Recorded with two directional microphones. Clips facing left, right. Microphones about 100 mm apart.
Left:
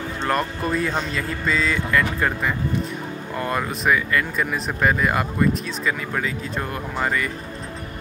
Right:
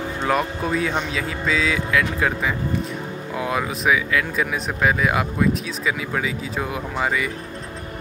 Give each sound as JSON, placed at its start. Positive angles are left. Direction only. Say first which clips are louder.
{"t": 0.2, "sound": "speech", "louder": "right 1 dB", "side_deg": -5}